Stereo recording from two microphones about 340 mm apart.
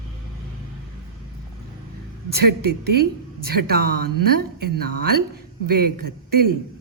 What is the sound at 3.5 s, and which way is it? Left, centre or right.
Speech, right.